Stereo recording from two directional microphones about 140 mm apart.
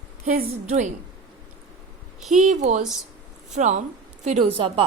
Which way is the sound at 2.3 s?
60° right (ahead or behind).